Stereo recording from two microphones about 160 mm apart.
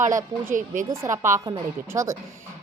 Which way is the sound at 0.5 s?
55° right (ahead or behind).